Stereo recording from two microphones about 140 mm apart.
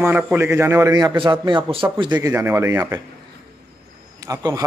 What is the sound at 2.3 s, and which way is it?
Speech, 20° right (ahead or behind).